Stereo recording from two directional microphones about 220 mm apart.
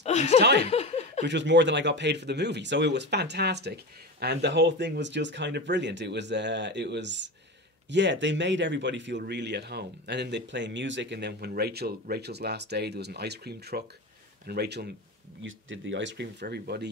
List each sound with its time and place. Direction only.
0.0 s snicker: 30° left (ahead or behind)
0.4 s speech: 50° right (ahead or behind)
0.7 s snicker: 30° left (ahead or behind)
1.2 s speech: 55° right (ahead or behind)
15.4 s speech: 60° right (ahead or behind)